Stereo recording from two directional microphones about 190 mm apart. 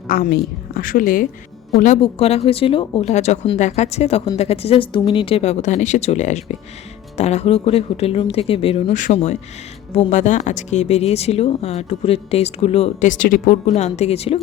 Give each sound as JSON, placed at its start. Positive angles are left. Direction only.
{"t": 0.1, "sound": "a woman's voice", "side_deg": 50}
{"t": 1.7, "sound": "speech", "side_deg": 35}
{"t": 13.7, "sound": "speech", "side_deg": 35}